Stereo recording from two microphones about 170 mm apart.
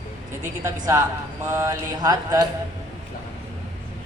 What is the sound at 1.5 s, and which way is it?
Speech, 15° right (ahead or behind).